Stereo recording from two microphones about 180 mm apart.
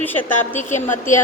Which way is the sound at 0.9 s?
45° left (ahead or behind).